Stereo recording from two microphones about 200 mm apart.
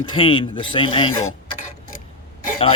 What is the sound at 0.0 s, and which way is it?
Speech, 25° left (ahead or behind).